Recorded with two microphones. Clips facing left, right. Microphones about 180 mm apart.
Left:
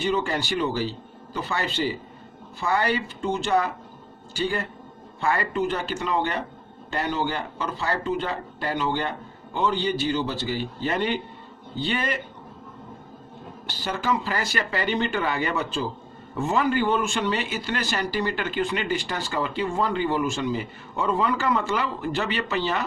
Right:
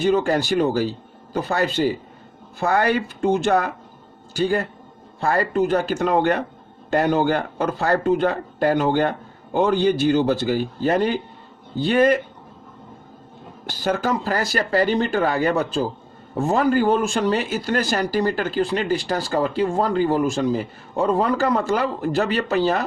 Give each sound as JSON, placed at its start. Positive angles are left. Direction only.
{"t": 0.0, "sound": "speech", "side_deg": -45}
{"t": 13.7, "sound": "speech", "side_deg": -45}